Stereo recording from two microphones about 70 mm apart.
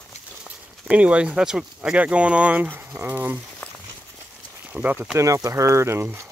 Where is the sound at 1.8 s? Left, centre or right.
Centre.